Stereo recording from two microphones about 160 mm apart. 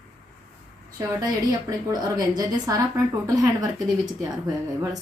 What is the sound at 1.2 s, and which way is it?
A woman's voice, 25° right (ahead or behind).